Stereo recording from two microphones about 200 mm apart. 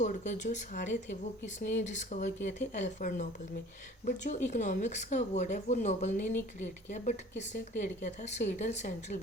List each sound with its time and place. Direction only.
0.0 s speech: 40° left (ahead or behind)